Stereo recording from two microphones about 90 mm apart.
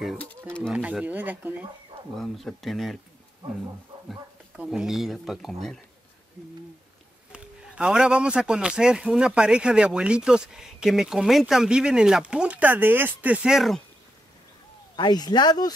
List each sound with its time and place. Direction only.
0.2 s speech: 10° left (ahead or behind)
1.0 s a man's voice: 20° right (ahead or behind)
2.1 s speech: centre (ahead or behind)
3.4 s speech: 70° right (ahead or behind)
4.1 s speech: 5° right (ahead or behind)
7.3 s a man's voice: 10° right (ahead or behind)
13.5 s speech: 5° right (ahead or behind)
15.0 s speech: 50° left (ahead or behind)